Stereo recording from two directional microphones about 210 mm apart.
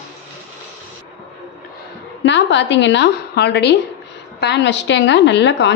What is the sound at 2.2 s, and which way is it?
A woman's voice, 60° left (ahead or behind).